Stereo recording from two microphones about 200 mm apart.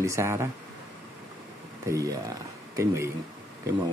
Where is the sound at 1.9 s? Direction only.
15° right (ahead or behind).